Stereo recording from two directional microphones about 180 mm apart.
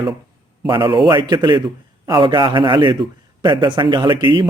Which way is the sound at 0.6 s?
25° right (ahead or behind).